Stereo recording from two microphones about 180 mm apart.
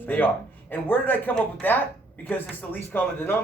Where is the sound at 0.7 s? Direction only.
10° left (ahead or behind).